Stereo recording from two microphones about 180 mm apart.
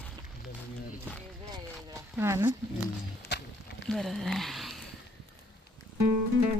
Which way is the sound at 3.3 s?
75° left (ahead or behind).